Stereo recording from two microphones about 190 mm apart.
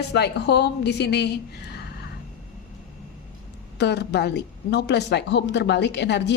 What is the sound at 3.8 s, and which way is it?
A woman's voice, 60° left (ahead or behind).